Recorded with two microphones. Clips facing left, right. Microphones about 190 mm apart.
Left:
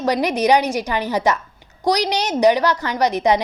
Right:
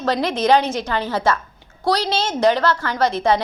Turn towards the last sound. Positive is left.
turn(degrees=15)  # may be behind; listen again after turning